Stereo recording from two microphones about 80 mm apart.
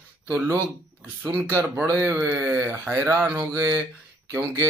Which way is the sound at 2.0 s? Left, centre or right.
Right.